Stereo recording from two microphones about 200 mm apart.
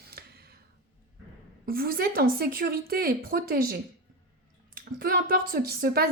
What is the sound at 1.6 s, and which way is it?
A woman's voice, 45° right (ahead or behind).